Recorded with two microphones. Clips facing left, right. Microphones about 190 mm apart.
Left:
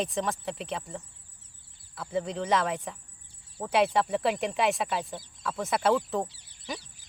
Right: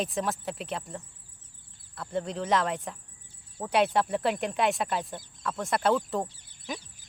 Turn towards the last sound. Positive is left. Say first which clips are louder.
# right 1 dB
turn(degrees=-50)  # may be behind; listen again after turning